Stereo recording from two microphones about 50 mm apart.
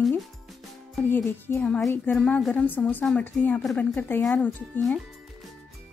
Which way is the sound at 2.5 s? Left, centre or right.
Left.